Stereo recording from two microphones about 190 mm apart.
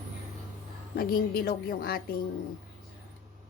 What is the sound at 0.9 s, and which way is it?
A woman's voice, 55° left (ahead or behind).